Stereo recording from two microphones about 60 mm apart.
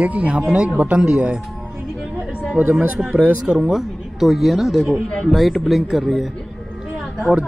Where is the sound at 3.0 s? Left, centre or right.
Right.